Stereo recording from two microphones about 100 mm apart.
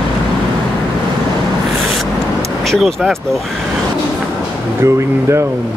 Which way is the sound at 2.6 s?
Centre (ahead or behind).